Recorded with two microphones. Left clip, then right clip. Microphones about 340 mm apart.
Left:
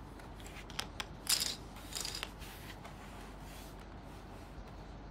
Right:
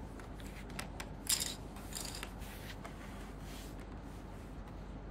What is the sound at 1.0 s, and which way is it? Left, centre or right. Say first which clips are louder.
Coin: left 3 dB; centre.